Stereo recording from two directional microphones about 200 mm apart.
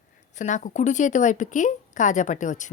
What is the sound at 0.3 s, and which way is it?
Speech, 40° left (ahead or behind).